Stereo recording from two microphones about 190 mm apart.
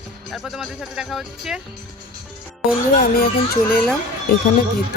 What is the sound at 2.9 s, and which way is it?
Speech, 50° left (ahead or behind).